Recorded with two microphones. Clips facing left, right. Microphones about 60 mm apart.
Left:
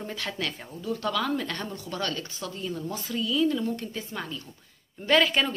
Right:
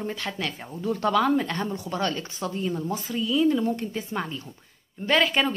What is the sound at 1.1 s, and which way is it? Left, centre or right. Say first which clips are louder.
Speech: right 7 dB; right.